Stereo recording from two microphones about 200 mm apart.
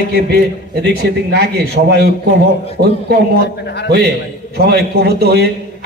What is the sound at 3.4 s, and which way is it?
Speech, 60° left (ahead or behind).